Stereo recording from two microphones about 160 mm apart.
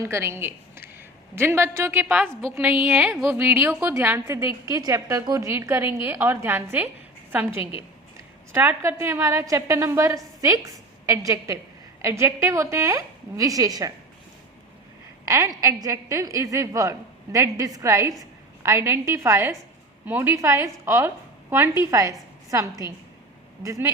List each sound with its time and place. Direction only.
0.0 s a woman's voice: 15° right (ahead or behind)
7.6 s a woman's voice: 35° left (ahead or behind)
8.5 s a woman's voice: 10° right (ahead or behind)
15.2 s a woman's voice: 20° right (ahead or behind)